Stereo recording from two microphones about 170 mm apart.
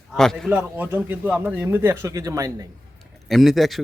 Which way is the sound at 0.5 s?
10° right (ahead or behind).